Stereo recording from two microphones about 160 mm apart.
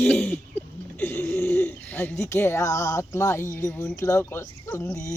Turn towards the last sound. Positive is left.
turn(degrees=20)  # may be behind; listen again after turning